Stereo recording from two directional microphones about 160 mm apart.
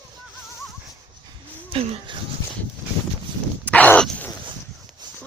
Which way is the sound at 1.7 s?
40° right (ahead or behind).